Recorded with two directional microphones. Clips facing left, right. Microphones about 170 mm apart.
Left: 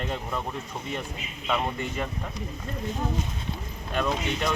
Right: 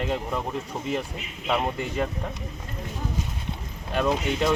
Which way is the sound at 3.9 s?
15° right (ahead or behind).